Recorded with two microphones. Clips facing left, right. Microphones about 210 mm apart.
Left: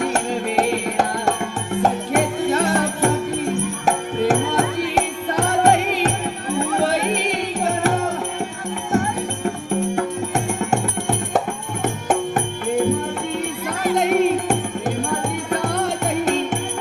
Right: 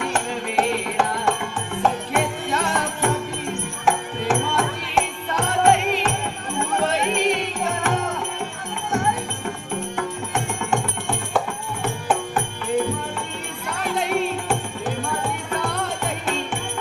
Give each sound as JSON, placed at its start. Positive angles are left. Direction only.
{"t": 0.0, "sound": "music", "side_deg": 40}
{"t": 9.9, "sound": "music", "side_deg": 40}
{"t": 13.9, "sound": "music", "side_deg": 45}